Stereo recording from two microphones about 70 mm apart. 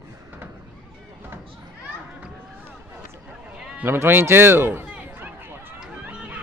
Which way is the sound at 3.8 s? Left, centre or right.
Right.